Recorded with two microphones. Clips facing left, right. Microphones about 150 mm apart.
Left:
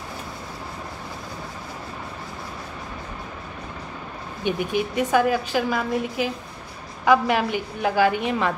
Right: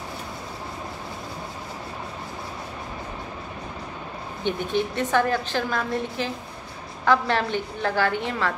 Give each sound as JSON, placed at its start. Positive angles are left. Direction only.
{"t": 4.4, "sound": "a woman's voice", "side_deg": 10}